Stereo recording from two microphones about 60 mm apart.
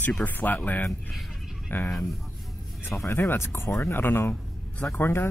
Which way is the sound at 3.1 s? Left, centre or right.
Left.